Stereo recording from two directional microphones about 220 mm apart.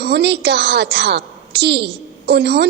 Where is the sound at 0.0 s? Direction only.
50° right (ahead or behind).